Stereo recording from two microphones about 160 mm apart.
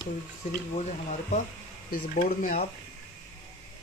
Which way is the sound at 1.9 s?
60° left (ahead or behind).